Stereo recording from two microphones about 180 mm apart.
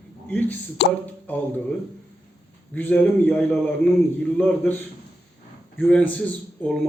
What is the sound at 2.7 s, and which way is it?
A man's voice, 10° left (ahead or behind).